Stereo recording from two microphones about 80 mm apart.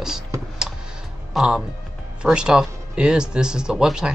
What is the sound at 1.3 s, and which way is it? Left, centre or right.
Speech, centre.